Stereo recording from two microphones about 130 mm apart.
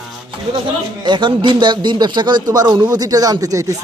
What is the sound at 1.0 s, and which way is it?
A man's voice, 35° right (ahead or behind).